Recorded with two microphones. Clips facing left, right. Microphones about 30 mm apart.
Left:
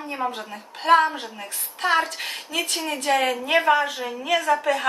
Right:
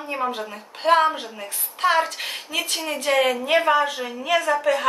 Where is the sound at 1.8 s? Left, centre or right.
Centre.